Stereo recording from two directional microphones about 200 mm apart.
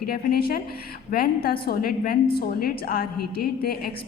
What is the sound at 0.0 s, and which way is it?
A woman's voice, 50° left (ahead or behind).